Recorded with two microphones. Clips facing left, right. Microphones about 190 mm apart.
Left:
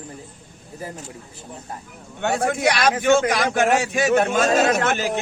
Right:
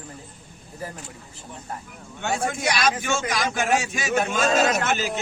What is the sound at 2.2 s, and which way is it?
A man's voice, 60° left (ahead or behind).